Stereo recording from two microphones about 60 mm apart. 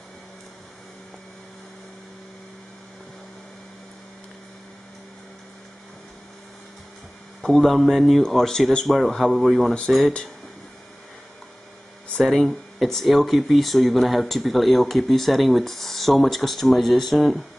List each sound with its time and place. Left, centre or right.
7.4 s speech: centre
12.2 s speech: centre